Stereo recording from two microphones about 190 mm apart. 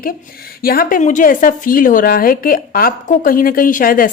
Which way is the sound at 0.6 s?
50° left (ahead or behind).